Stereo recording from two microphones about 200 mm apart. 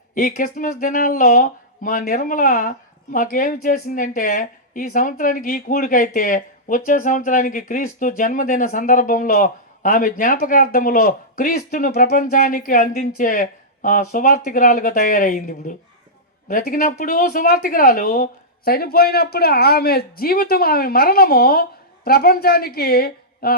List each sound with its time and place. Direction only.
0.1 s speech: 45° left (ahead or behind)